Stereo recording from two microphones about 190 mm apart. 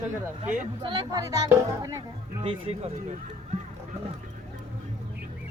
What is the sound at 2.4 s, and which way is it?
Speech, 30° right (ahead or behind).